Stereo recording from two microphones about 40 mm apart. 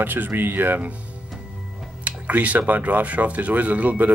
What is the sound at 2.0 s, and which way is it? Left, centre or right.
Speech, right.